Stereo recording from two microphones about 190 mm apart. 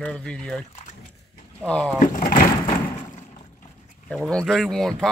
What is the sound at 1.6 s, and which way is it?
Speech, 5° left (ahead or behind).